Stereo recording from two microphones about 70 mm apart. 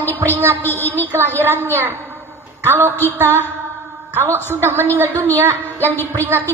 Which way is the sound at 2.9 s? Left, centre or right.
Left.